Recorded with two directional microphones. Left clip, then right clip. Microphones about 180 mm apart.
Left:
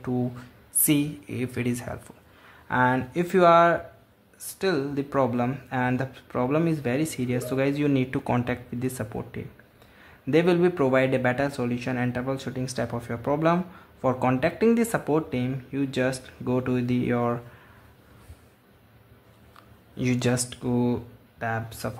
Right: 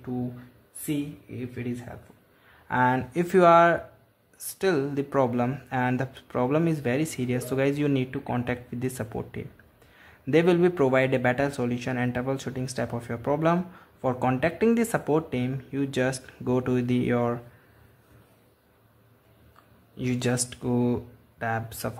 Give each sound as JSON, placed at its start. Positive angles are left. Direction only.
{"t": 0.8, "sound": "speech", "side_deg": 25}
{"t": 2.7, "sound": "speech", "side_deg": 0}
{"t": 8.1, "sound": "speech", "side_deg": 15}
{"t": 8.5, "sound": "speech", "side_deg": 0}
{"t": 20.0, "sound": "speech", "side_deg": 10}